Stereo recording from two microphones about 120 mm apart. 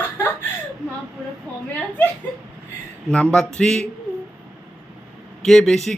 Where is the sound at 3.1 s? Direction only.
10° left (ahead or behind).